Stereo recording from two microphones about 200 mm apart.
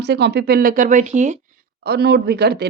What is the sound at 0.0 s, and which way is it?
Speech, 55° right (ahead or behind).